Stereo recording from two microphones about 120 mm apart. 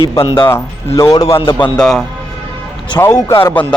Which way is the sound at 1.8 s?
5° left (ahead or behind).